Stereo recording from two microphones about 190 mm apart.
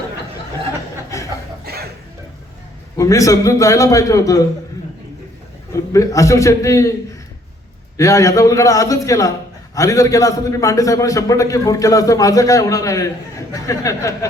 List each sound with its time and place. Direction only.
1.7 s music: 55° right (ahead or behind)
3.0 s a man's voice: 15° left (ahead or behind)
5.9 s a man's voice: 15° left (ahead or behind)
7.9 s a man's voice: 15° left (ahead or behind)